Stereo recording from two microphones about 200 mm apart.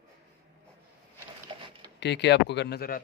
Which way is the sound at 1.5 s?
25° right (ahead or behind).